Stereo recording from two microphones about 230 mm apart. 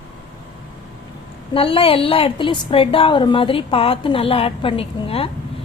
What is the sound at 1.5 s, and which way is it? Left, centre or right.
A woman's voice, left.